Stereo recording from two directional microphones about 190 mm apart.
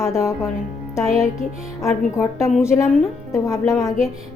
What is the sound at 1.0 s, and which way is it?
Speech, centre (ahead or behind).